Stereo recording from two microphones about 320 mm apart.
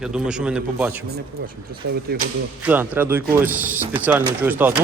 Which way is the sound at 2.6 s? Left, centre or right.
Centre.